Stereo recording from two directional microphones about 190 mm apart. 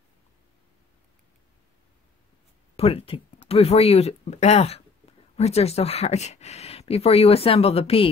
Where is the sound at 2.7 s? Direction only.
30° left (ahead or behind).